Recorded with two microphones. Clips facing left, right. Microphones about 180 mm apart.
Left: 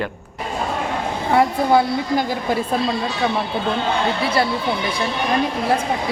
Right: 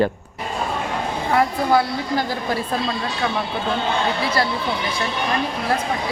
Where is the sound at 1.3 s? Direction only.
25° left (ahead or behind).